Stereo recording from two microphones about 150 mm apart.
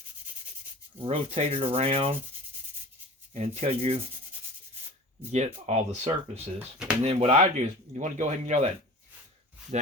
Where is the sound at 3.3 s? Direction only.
45° right (ahead or behind).